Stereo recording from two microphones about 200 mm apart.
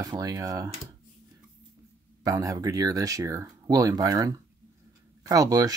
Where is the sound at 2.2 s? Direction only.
15° right (ahead or behind).